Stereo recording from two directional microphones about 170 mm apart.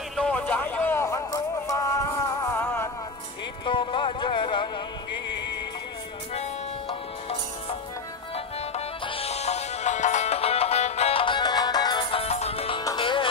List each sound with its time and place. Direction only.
0.1 s a sound: 5° left (ahead or behind)
3.6 s music: 30° left (ahead or behind)
8.7 s music: 35° left (ahead or behind)